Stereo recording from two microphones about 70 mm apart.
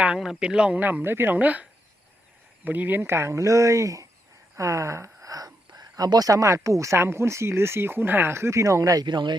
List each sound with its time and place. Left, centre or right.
0.2 s speech: centre
0.8 s speech: right
2.6 s speech: right
3.0 s speech: right
9.0 s speech: right